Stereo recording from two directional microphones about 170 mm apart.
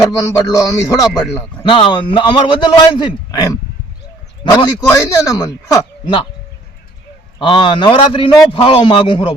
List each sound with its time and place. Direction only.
0.0 s a man's voice: 20° left (ahead or behind)
7.3 s a man's voice: 30° left (ahead or behind)